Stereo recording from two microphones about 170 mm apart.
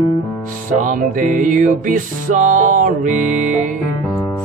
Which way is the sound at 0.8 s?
50° right (ahead or behind).